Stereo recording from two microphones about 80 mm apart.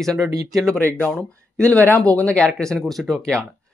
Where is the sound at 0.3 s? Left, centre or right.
Right.